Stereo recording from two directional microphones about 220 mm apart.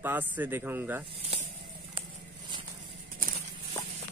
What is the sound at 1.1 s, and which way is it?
Speech, 25° right (ahead or behind).